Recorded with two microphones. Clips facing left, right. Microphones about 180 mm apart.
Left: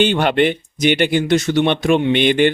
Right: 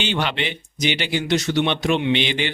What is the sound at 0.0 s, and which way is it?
Speech, 50° left (ahead or behind).